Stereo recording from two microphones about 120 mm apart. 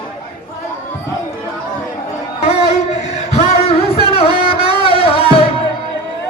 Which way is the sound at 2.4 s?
60° left (ahead or behind).